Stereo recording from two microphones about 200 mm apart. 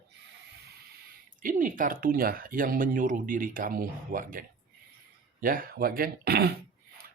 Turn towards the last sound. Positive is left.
turn(degrees=-50)  # may be behind; listen again after turning